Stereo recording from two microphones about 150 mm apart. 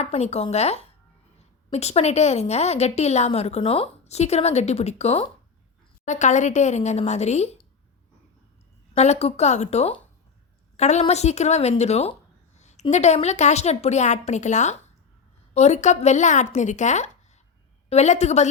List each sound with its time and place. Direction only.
0.0 s a woman's voice: 45° left (ahead or behind)
6.1 s a woman's voice: 55° left (ahead or behind)
9.0 s a woman's voice: 45° left (ahead or behind)
12.5 s a sound: 50° left (ahead or behind)
12.9 s a woman's voice: 50° left (ahead or behind)